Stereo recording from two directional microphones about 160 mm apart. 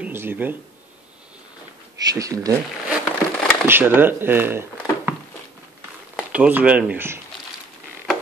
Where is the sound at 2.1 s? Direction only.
20° right (ahead or behind).